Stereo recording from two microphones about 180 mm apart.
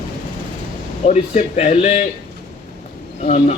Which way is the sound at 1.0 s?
40° left (ahead or behind).